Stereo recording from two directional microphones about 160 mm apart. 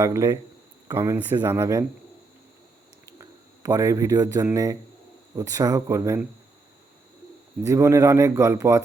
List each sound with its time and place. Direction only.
0.0 s a man's voice: 20° right (ahead or behind)
3.1 s a sound: 20° right (ahead or behind)
4.5 s a man's voice: 20° right (ahead or behind)
7.6 s a man's voice: 20° right (ahead or behind)